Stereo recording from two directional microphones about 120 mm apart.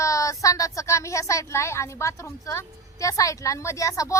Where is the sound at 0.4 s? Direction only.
25° left (ahead or behind).